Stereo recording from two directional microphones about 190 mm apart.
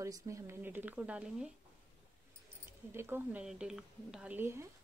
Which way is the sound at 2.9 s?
10° right (ahead or behind).